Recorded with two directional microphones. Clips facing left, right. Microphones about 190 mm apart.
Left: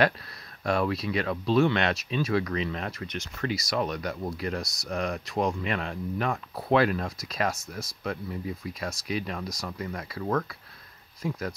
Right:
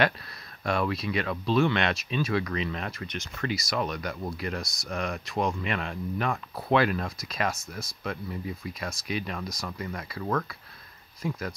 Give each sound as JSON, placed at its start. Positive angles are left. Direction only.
{"t": 0.7, "sound": "speech", "side_deg": 35}